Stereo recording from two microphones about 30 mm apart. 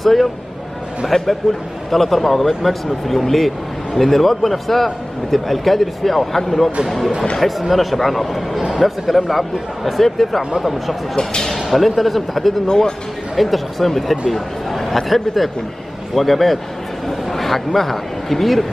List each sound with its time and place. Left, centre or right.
0.0 s speech: centre
7.7 s speech: centre
12.6 s speech: left
13.4 s speech: centre